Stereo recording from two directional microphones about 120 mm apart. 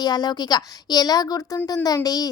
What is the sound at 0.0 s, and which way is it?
Speech, 35° left (ahead or behind).